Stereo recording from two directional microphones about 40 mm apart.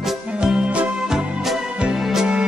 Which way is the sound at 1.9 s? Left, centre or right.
Centre.